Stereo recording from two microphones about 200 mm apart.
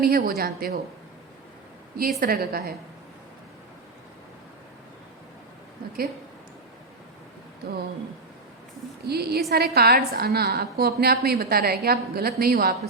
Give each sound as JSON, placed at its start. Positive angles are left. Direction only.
{"t": 0.0, "sound": "a woman's voice", "side_deg": -50}
{"t": 2.0, "sound": "a woman's voice", "side_deg": -45}
{"t": 9.0, "sound": "a woman's voice", "side_deg": -55}